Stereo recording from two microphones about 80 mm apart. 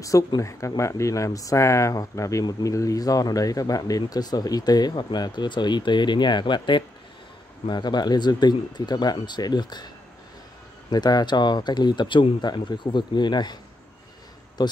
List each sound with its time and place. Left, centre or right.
0.4 s speech: left
7.6 s speech: left
10.9 s speech: left
14.6 s speech: left